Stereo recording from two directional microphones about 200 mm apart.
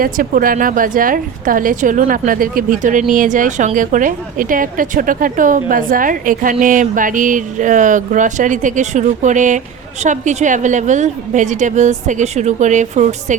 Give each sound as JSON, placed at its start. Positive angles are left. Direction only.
{"t": 0.0, "sound": "a woman's voice", "side_deg": -45}